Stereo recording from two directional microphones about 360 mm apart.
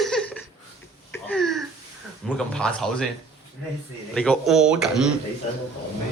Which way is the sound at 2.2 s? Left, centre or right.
Centre.